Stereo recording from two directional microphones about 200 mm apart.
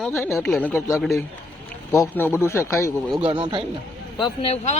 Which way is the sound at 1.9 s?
10° left (ahead or behind).